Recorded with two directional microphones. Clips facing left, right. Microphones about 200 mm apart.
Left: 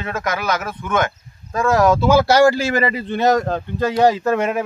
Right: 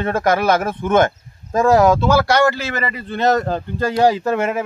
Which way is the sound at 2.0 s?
20° left (ahead or behind).